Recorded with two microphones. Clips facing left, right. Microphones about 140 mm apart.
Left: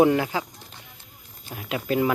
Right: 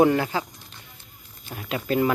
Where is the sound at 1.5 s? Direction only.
10° left (ahead or behind).